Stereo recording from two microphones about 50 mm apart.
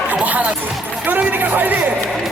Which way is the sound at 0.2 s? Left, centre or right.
Right.